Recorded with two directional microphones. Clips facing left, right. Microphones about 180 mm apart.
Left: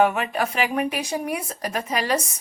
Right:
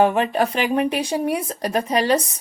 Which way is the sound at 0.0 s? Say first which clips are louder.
Right 3 dB; 30° right (ahead or behind).